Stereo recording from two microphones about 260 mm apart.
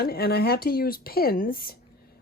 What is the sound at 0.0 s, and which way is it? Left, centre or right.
A woman's voice, left.